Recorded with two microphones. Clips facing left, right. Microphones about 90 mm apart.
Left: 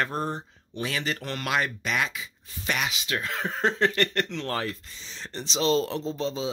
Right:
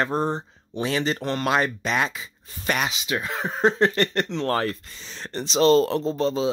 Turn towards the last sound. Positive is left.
turn(degrees=-55)  # may be behind; listen again after turning